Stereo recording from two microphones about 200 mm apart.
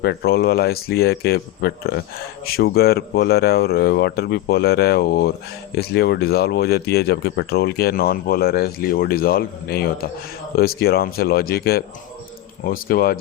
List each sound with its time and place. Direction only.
0.0 s speech: 50° left (ahead or behind)